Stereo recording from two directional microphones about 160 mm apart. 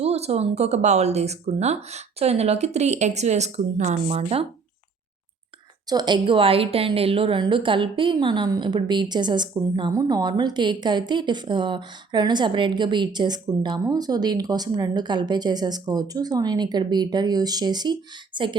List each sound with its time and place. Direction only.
0.0 s speech: 40° right (ahead or behind)
5.9 s a woman's voice: 25° right (ahead or behind)